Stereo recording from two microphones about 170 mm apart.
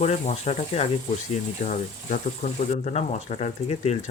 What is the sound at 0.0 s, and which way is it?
Speech, 40° left (ahead or behind).